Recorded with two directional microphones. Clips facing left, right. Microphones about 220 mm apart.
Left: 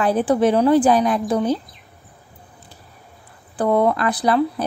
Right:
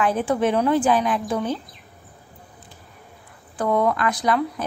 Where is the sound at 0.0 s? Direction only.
35° left (ahead or behind).